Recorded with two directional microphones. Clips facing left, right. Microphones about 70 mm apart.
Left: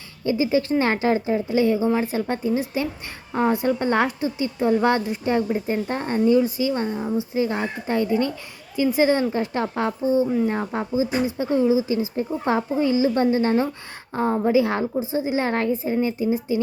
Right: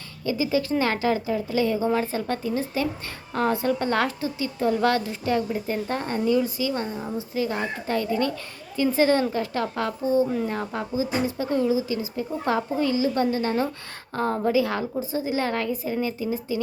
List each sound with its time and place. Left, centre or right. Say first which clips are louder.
0.3 s speech: left 3 dB; left